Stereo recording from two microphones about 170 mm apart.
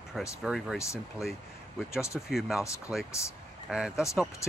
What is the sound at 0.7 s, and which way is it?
Speech, 15° left (ahead or behind).